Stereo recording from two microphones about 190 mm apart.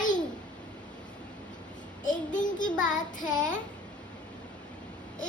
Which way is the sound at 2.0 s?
40° left (ahead or behind).